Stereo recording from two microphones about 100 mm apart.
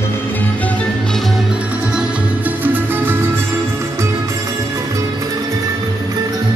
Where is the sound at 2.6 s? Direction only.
20° right (ahead or behind).